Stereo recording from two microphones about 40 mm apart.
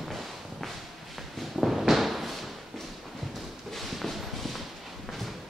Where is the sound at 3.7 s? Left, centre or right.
Centre.